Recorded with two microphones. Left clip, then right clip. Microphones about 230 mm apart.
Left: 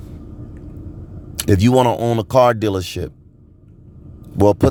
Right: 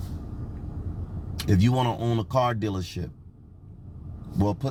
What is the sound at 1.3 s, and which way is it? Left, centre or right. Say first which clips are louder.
Speech: left 12 dB; left.